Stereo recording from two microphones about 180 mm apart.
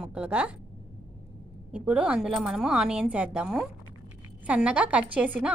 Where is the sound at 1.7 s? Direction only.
5° right (ahead or behind).